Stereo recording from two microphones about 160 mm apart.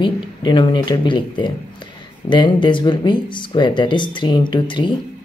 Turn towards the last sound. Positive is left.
turn(degrees=30)  # may be behind; listen again after turning